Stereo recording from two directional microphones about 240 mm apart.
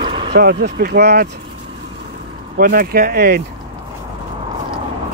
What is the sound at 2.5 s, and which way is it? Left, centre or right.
Speech, right.